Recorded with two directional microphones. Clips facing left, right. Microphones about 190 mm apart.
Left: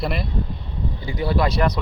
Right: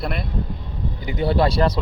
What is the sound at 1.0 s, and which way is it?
Speech, 25° right (ahead or behind).